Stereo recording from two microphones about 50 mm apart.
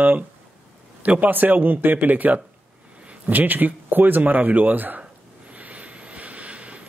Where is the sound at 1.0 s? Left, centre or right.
Right.